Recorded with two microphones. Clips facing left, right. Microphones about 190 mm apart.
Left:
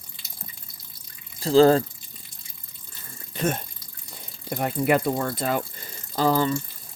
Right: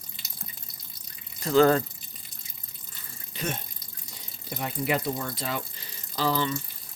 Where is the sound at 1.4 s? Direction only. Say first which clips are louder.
Left 4 dB; 30° left (ahead or behind).